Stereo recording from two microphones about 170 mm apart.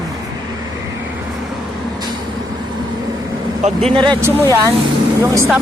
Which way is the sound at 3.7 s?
5° left (ahead or behind).